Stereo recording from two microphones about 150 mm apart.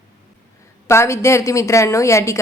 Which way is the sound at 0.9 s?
20° left (ahead or behind).